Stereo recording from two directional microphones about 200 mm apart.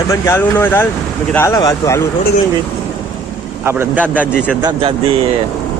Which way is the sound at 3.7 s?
10° right (ahead or behind).